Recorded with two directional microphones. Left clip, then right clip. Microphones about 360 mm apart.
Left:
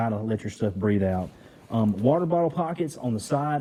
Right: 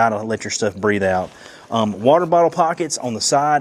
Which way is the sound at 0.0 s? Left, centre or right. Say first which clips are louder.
Right 11 dB; centre.